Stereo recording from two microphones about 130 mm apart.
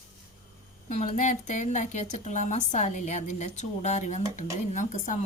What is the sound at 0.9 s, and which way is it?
Speech, 65° left (ahead or behind).